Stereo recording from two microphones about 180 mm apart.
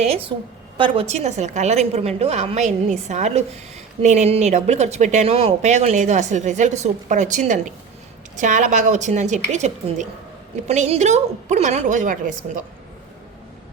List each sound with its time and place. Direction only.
0.8 s speech: 35° right (ahead or behind)